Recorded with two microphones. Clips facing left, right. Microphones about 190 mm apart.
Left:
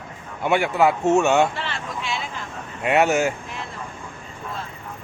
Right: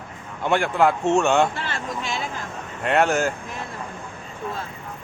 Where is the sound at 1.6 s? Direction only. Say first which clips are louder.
Right 1 dB; 45° right (ahead or behind).